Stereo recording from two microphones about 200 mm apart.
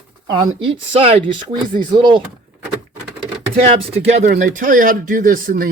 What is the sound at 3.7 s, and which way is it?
Speech, 35° right (ahead or behind).